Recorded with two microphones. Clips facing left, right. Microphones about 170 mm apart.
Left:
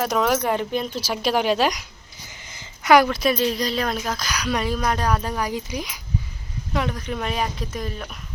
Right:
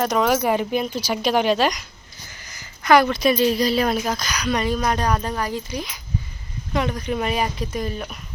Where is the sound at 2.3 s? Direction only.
20° left (ahead or behind).